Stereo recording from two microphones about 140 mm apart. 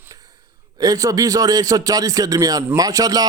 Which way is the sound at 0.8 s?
25° right (ahead or behind).